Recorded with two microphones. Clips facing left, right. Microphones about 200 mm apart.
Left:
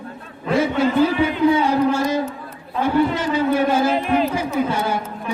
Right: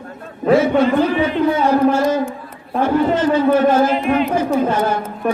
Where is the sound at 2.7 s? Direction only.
50° right (ahead or behind).